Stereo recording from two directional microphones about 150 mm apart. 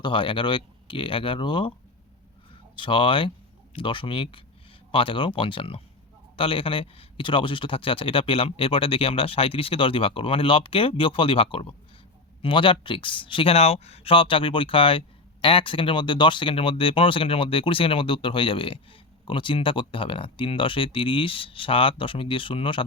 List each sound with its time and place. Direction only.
0.0 s speech: 35° left (ahead or behind)
2.7 s speech: 30° left (ahead or behind)